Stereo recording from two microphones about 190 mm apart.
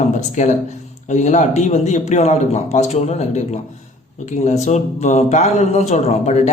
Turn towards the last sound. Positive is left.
turn(degrees=35)  # may be behind; listen again after turning